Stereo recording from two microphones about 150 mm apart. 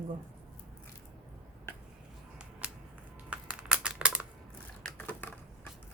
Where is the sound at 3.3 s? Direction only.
5° right (ahead or behind).